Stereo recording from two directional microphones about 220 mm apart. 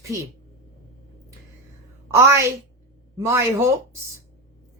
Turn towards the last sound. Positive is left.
turn(degrees=-10)  # may be behind; listen again after turning